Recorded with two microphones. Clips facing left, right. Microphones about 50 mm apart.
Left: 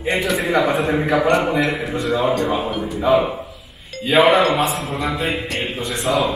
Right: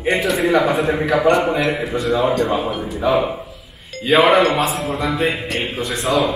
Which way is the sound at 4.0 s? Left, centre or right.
Right.